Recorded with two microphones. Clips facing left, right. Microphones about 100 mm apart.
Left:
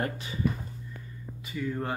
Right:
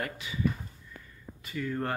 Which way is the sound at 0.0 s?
35° left (ahead or behind).